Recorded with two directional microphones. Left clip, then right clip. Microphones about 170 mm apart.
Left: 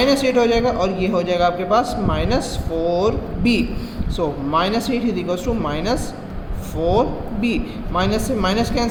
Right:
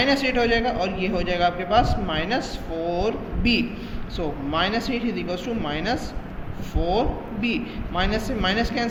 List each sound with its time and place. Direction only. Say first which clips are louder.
0.0 s a man's voice: left 5 dB; 40° left (ahead or behind)